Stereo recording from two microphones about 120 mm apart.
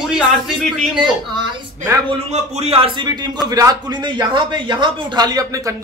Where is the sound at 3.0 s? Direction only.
35° right (ahead or behind).